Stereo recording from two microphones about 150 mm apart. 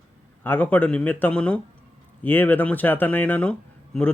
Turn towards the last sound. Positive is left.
turn(degrees=10)  # may be behind; listen again after turning